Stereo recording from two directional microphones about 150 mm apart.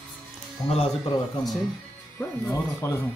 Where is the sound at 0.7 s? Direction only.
40° left (ahead or behind).